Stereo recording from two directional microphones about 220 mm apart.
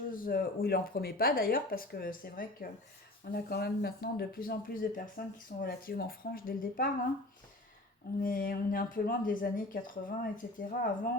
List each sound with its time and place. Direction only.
0.1 s speech: 40° left (ahead or behind)
8.2 s speech: 40° left (ahead or behind)